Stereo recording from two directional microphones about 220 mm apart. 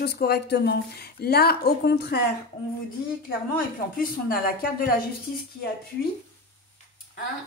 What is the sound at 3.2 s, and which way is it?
Speech, 40° left (ahead or behind).